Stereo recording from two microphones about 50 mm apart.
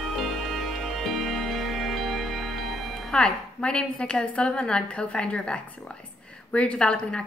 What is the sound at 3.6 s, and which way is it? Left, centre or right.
A woman's voice, left.